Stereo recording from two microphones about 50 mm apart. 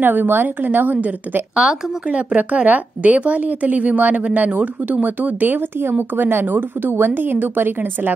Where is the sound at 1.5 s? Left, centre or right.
Centre.